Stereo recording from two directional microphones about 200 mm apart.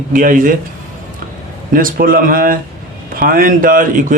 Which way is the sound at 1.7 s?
45° right (ahead or behind).